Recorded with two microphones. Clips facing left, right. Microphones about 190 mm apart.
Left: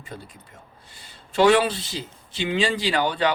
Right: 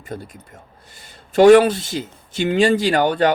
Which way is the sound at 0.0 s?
45° right (ahead or behind).